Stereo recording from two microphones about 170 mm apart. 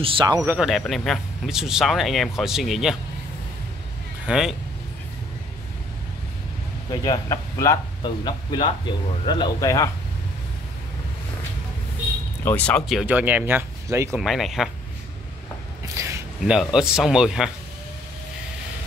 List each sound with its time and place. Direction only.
0.0 s speech: 30° right (ahead or behind)
0.5 s speech: 5° right (ahead or behind)
4.3 s speech: 5° right (ahead or behind)
6.9 s speech: 20° left (ahead or behind)
12.4 s speech: 10° left (ahead or behind); by 14.2 s 15° right (ahead or behind)
14.2 s speech: centre (ahead or behind)
16.4 s speech: 5° right (ahead or behind)